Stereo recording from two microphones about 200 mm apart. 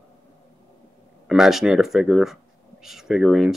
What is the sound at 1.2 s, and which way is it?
Speech, centre (ahead or behind).